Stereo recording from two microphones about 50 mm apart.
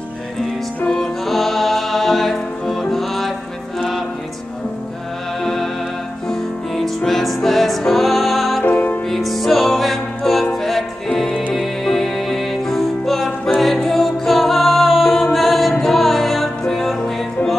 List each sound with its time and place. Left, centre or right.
0.8 s music: centre
1.2 s music: centre
5.4 s music: centre
8.6 s music: left
9.1 s music: centre